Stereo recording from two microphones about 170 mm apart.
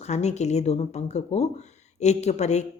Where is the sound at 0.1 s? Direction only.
40° left (ahead or behind).